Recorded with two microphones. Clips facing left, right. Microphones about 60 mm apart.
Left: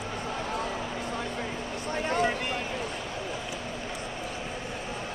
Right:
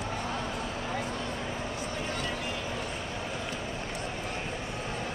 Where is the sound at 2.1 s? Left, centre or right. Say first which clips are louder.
Left 12 dB; left.